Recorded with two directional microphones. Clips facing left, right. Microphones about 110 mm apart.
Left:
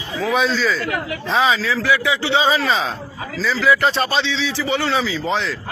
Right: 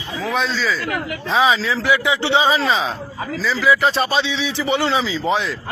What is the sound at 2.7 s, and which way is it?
A man's voice, 5° right (ahead or behind).